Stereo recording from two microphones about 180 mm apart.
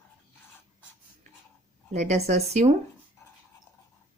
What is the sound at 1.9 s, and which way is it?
Speech, 40° right (ahead or behind).